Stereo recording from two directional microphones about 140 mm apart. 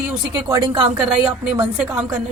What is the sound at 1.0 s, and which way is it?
A woman's voice, 10° right (ahead or behind).